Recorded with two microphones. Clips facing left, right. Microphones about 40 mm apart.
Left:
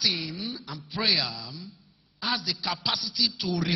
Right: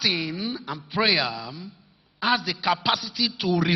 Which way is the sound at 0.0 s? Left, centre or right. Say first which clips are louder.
Right 4 dB; right.